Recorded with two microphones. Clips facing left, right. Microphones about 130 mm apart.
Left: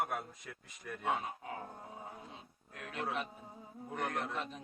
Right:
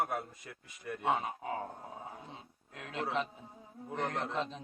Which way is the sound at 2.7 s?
25° right (ahead or behind).